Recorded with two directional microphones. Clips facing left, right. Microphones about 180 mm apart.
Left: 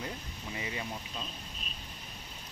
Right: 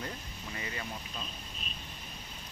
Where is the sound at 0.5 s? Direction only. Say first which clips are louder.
Left 2 dB; 15° left (ahead or behind).